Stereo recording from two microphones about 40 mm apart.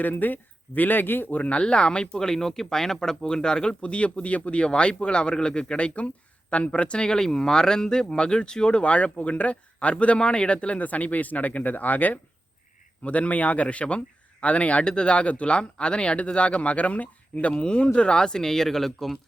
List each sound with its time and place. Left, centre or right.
0.0 s a man's voice: left
1.4 s speech: left
10.8 s a man's voice: left
13.1 s speech: left; by 19.1 s centre